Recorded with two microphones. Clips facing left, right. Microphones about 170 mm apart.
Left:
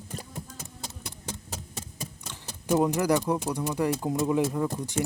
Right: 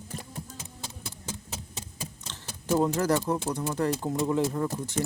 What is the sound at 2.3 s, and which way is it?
Speech, 15° left (ahead or behind).